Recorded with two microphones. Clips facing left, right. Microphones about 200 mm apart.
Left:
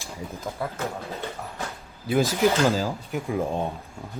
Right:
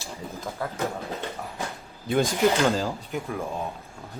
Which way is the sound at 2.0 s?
5° left (ahead or behind).